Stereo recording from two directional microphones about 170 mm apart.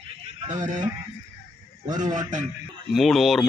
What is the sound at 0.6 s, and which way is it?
Speech, 45° right (ahead or behind).